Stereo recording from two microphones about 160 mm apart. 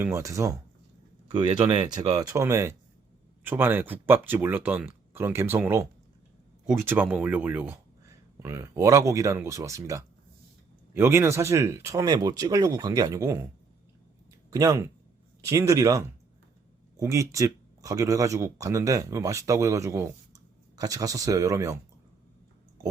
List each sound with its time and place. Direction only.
0.0 s speech: 20° right (ahead or behind)
14.5 s speech: 20° right (ahead or behind)